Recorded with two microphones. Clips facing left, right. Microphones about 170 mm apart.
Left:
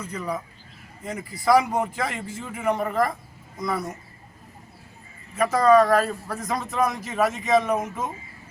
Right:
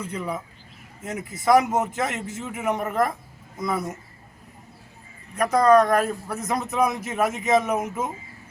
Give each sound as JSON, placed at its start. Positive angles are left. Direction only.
{"t": 0.0, "sound": "a man's voice", "side_deg": -10}
{"t": 1.5, "sound": "speech", "side_deg": 0}
{"t": 1.9, "sound": "a man's voice", "side_deg": -20}
{"t": 2.4, "sound": "speech", "side_deg": -5}
{"t": 5.4, "sound": "speech", "side_deg": 0}
{"t": 6.0, "sound": "a man's voice", "side_deg": -20}
{"t": 6.8, "sound": "speech", "side_deg": 0}